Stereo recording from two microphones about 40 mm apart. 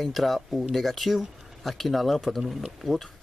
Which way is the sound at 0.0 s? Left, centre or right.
Centre.